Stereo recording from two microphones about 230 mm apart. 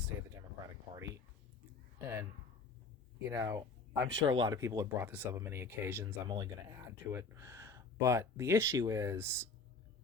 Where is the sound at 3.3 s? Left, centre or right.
Centre.